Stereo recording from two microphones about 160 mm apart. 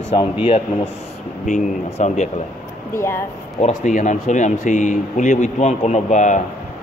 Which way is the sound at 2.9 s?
15° left (ahead or behind).